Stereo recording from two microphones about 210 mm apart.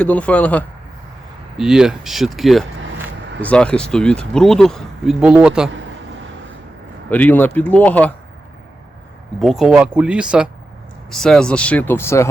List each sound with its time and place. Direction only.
0.0 s speech: 5° left (ahead or behind)
7.1 s speech: 10° left (ahead or behind)
9.4 s speech: centre (ahead or behind)